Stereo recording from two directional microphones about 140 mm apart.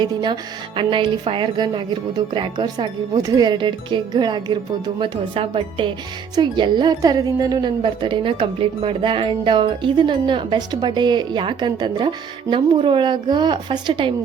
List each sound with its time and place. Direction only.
0.0 s a woman's voice: 30° right (ahead or behind)